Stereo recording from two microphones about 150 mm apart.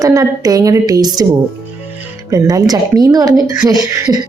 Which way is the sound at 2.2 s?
20° right (ahead or behind).